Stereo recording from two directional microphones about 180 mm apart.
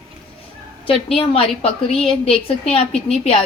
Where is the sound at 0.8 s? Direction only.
30° left (ahead or behind).